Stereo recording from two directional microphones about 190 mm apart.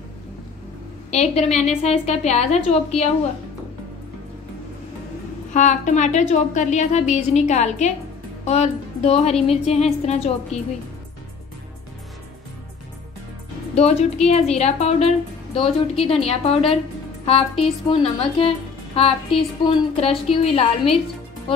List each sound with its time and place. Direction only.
1.1 s a woman's voice: 35° left (ahead or behind)
5.5 s a woman's voice: 40° left (ahead or behind)
13.7 s a woman's voice: 35° left (ahead or behind)